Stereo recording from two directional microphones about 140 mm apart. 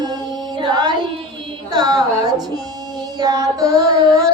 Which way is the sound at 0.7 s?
30° right (ahead or behind).